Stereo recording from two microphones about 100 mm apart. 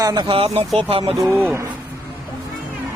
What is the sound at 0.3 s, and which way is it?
Speech, 70° right (ahead or behind).